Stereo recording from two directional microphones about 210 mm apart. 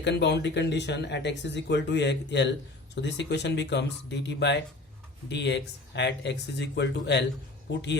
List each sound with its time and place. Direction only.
0.0 s speech: 55° left (ahead or behind)